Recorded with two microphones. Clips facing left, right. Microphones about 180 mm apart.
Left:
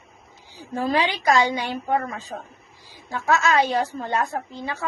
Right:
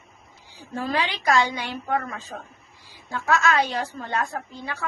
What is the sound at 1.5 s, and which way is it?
Speech, 45° left (ahead or behind).